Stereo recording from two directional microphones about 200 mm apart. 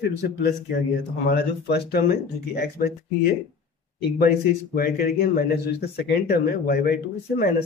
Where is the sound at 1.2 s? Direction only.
55° left (ahead or behind).